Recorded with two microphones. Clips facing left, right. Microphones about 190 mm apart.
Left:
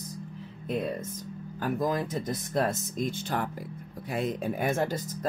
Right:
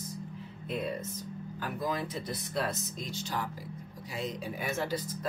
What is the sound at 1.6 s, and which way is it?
Speech, 45° left (ahead or behind).